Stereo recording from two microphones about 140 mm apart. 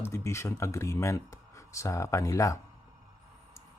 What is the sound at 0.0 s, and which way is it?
Speech, 20° left (ahead or behind).